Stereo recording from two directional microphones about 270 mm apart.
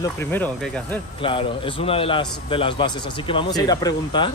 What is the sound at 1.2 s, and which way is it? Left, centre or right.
A man's voice, centre.